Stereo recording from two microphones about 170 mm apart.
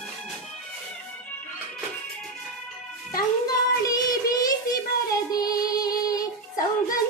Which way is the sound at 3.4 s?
20° left (ahead or behind).